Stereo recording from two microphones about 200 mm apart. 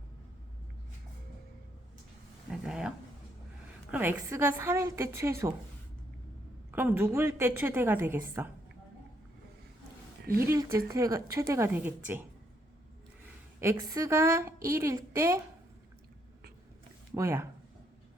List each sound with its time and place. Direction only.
2.5 s speech: 5° right (ahead or behind)
3.9 s a woman's voice: 10° right (ahead or behind)
6.7 s a woman's voice: 10° right (ahead or behind)
10.4 s a woman's voice: 15° right (ahead or behind)
13.6 s a woman's voice: 15° right (ahead or behind)
17.2 s a woman's voice: 15° right (ahead or behind)